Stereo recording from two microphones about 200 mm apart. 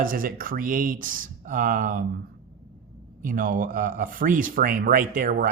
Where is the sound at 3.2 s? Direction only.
45° right (ahead or behind).